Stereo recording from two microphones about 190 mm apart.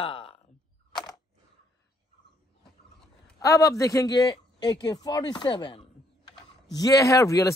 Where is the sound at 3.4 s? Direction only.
15° left (ahead or behind).